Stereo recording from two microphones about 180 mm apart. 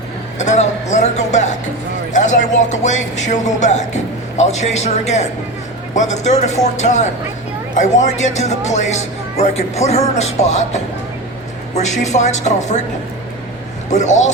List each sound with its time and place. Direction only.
0.3 s speech: 40° left (ahead or behind)
13.9 s speech: 40° left (ahead or behind)